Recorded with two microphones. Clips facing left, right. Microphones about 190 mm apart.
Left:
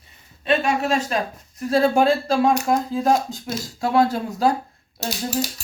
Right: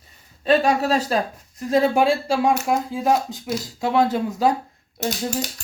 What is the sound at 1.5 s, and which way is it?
Speech, 20° right (ahead or behind).